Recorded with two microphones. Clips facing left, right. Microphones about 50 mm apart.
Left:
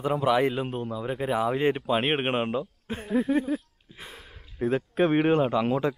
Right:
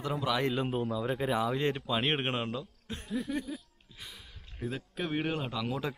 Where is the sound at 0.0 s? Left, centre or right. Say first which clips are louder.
Left 8 dB; left.